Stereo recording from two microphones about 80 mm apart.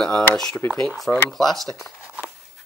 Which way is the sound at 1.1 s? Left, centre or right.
Left.